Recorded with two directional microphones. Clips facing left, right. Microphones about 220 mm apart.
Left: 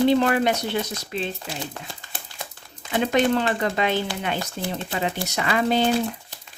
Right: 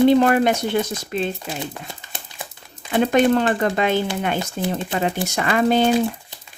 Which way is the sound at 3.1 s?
50° right (ahead or behind).